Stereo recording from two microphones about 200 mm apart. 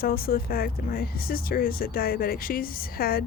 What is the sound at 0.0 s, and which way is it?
Speech, 45° left (ahead or behind).